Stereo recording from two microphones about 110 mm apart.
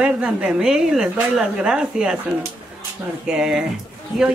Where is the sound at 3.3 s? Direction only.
5° right (ahead or behind).